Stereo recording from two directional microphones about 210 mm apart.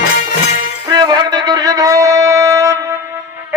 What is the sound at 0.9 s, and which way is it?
Wind instrument, 20° right (ahead or behind).